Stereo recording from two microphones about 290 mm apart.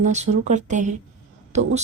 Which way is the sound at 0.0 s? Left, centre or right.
Right.